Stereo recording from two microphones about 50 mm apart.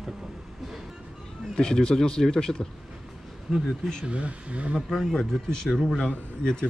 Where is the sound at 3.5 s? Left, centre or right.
Centre.